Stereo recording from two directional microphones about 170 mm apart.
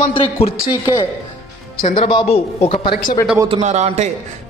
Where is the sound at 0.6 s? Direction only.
20° left (ahead or behind).